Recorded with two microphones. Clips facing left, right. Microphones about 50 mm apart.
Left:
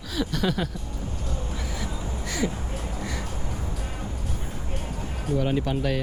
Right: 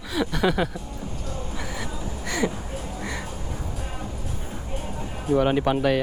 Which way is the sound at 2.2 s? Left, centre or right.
Right.